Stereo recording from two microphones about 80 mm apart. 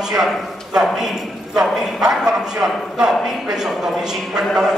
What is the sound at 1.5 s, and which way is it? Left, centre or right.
A man's voice, centre.